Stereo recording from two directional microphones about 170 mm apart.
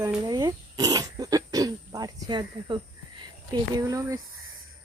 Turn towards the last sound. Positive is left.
turn(degrees=-20)  # may be behind; listen again after turning